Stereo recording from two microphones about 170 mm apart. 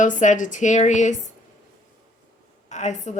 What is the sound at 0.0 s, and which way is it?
Speech, 45° left (ahead or behind).